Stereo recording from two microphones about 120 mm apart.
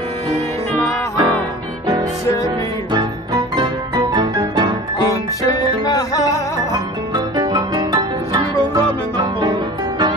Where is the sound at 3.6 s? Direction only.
40° right (ahead or behind).